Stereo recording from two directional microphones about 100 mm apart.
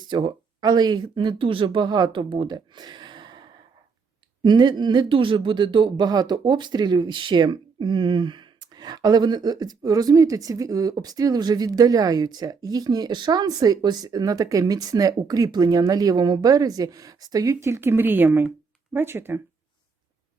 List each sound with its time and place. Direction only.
0.0 s speech: 50° right (ahead or behind); by 19.4 s 25° right (ahead or behind)